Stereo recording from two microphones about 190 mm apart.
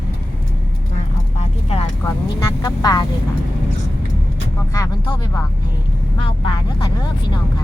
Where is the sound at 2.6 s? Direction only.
20° left (ahead or behind).